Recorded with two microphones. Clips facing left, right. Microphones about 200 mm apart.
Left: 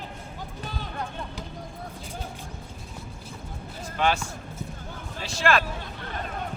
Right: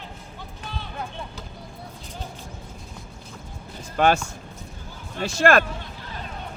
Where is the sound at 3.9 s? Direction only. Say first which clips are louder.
Right 5 dB; 50° right (ahead or behind).